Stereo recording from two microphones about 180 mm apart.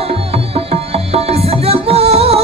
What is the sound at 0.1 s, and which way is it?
Music, 35° right (ahead or behind).